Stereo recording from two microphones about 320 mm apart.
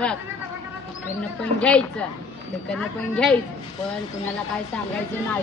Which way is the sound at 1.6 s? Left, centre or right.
Centre.